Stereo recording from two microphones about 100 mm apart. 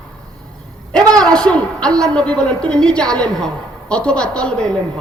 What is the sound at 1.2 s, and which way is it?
A woman's voice, 10° left (ahead or behind).